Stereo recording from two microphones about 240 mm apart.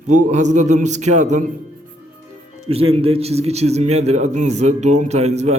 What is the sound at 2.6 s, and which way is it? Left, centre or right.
A man's voice, right.